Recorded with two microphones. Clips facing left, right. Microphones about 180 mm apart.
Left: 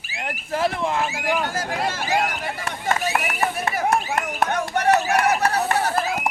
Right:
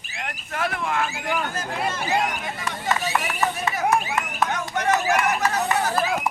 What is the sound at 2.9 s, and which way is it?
Speech, 50° left (ahead or behind).